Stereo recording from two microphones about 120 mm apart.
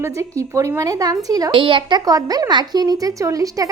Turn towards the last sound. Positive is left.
turn(degrees=-30)  # may be behind; listen again after turning